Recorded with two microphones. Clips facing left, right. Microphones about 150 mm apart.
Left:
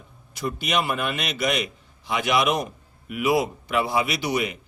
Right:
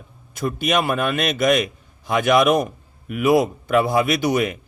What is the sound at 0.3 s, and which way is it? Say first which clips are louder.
A man's voice: right 5 dB; 50° right (ahead or behind).